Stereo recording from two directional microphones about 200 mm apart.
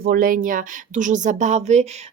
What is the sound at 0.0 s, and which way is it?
Speech, 45° right (ahead or behind).